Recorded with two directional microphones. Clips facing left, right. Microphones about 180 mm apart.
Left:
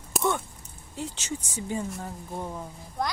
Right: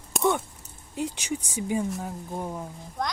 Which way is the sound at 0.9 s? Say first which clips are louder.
Right 4 dB; 15° right (ahead or behind).